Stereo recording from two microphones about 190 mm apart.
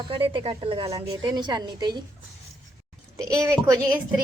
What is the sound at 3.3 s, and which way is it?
Speech, 15° right (ahead or behind).